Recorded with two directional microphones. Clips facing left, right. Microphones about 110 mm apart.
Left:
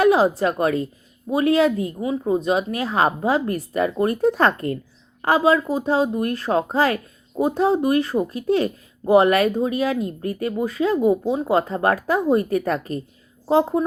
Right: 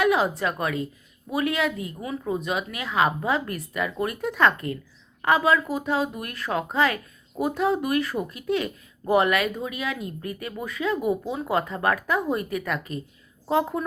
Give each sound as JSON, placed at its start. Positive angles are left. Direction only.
{"t": 0.0, "sound": "speech", "side_deg": 30}